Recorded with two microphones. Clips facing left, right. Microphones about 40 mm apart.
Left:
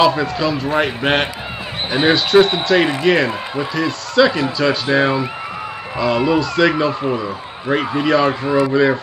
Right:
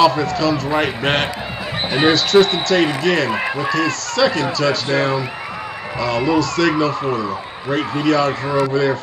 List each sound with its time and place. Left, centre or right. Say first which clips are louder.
0.0 s speech: even; centre
2.1 s a man's voice: left 1 dB; centre